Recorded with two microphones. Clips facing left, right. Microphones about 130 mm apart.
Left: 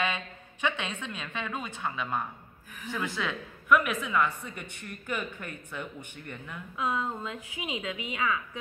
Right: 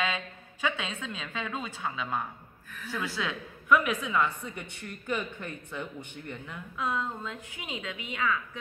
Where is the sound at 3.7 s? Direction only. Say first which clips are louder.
Even; 20° right (ahead or behind).